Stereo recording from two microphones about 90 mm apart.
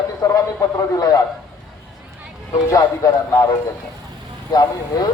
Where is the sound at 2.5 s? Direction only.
35° left (ahead or behind).